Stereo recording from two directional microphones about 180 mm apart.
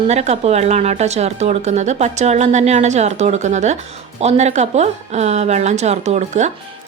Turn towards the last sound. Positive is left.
turn(degrees=-40)  # may be behind; listen again after turning